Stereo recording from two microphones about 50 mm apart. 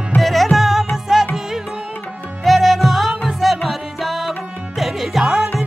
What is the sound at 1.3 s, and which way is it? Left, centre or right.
Music, centre.